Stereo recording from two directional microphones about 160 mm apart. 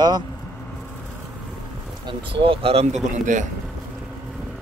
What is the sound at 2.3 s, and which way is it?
Speech, 35° right (ahead or behind).